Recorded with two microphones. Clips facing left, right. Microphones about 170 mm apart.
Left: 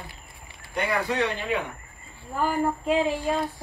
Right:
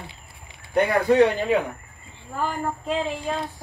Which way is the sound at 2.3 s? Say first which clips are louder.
Left 2 dB; 10° left (ahead or behind).